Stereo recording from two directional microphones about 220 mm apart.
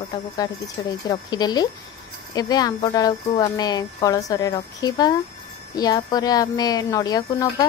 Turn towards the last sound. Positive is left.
turn(degrees=15)  # may be behind; listen again after turning